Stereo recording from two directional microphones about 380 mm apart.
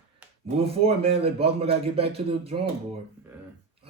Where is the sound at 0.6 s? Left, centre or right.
Centre.